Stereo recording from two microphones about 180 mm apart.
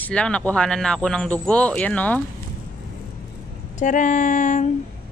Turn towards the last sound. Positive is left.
turn(degrees=45)  # may be behind; listen again after turning